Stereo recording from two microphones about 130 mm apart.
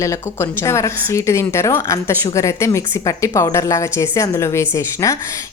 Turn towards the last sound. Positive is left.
turn(degrees=20)  # may be behind; listen again after turning